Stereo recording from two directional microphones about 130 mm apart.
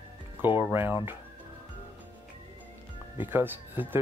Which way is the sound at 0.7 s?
20° right (ahead or behind).